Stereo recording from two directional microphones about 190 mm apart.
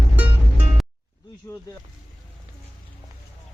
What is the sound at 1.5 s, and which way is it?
Speech, 15° left (ahead or behind).